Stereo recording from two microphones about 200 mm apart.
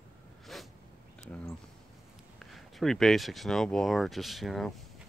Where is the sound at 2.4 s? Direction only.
Centre (ahead or behind).